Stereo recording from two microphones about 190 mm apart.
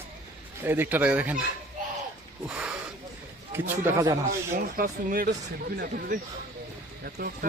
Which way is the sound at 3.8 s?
15° right (ahead or behind).